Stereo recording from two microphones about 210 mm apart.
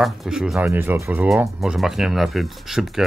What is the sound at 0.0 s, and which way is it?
Speech, centre (ahead or behind).